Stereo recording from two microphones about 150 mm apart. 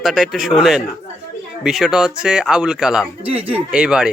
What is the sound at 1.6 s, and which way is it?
A man's voice, 5° right (ahead or behind).